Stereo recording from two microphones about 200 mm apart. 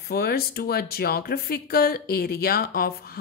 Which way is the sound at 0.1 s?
50° left (ahead or behind).